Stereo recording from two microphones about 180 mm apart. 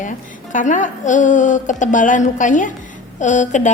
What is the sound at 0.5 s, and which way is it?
A woman's voice, 45° left (ahead or behind).